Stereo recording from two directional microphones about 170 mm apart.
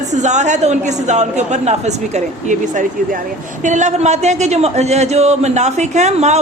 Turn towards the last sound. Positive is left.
turn(degrees=-40)  # may be behind; listen again after turning